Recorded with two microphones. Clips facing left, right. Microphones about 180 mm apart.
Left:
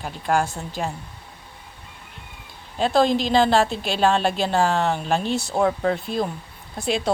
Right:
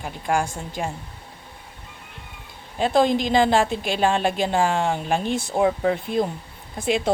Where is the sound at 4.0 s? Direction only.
15° right (ahead or behind).